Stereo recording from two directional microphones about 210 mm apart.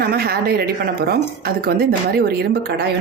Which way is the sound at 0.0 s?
45° right (ahead or behind).